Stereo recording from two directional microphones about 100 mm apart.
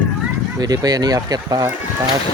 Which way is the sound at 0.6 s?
40° right (ahead or behind).